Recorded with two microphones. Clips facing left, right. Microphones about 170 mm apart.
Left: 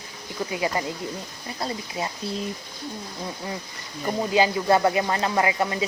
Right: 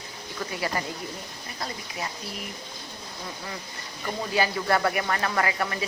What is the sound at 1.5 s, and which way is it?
Speech, 25° left (ahead or behind).